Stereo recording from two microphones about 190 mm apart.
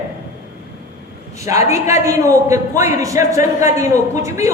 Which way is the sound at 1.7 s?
15° right (ahead or behind).